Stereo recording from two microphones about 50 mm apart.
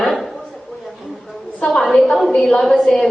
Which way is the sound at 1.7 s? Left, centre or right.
Centre.